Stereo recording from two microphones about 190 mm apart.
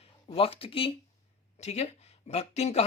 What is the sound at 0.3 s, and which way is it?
A man's voice, 30° left (ahead or behind).